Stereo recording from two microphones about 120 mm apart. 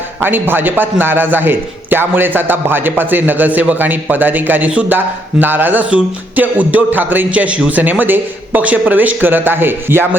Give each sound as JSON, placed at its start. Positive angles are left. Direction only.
{"t": 0.2, "sound": "a man's voice", "side_deg": -15}